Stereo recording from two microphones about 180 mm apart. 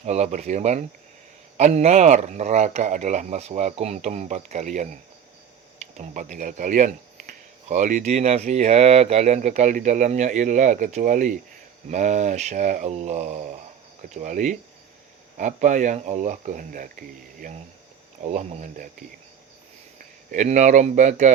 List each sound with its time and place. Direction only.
0.0 s a man's voice: 40° right (ahead or behind)
6.0 s a man's voice: 45° right (ahead or behind)
20.3 s a man's voice: 40° right (ahead or behind)